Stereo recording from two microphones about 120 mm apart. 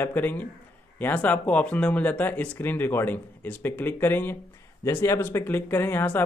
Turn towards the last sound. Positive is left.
turn(degrees=20)  # may be behind; listen again after turning